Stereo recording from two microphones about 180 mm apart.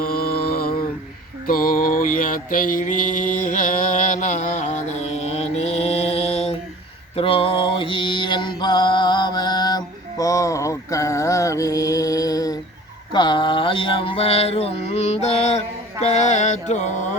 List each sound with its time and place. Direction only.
0.0 s mantra: 55° left (ahead or behind); by 17.2 s 40° left (ahead or behind)